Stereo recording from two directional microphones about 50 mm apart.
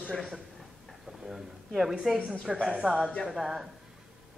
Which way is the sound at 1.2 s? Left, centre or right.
Centre.